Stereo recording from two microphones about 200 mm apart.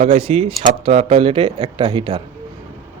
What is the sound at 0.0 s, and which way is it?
A man's voice, 30° right (ahead or behind).